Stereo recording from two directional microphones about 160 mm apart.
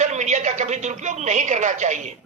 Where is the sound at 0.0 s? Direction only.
50° right (ahead or behind).